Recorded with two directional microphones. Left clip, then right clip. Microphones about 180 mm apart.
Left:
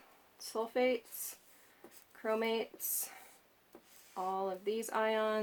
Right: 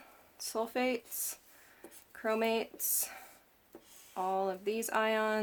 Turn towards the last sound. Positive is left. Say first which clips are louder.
# right 2 dB
turn(degrees=-40)  # may be behind; listen again after turning